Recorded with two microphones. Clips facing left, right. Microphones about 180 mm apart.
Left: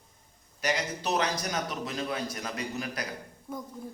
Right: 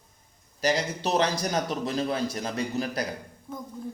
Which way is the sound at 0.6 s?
30° right (ahead or behind).